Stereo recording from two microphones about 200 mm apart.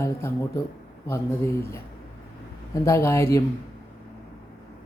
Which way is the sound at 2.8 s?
15° left (ahead or behind).